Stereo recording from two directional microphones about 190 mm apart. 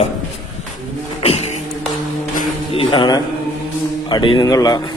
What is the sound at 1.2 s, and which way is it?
Music, 35° left (ahead or behind).